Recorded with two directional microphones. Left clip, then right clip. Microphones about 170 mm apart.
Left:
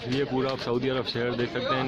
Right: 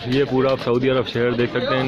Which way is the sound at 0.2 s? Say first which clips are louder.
Right 10 dB; 15° right (ahead or behind).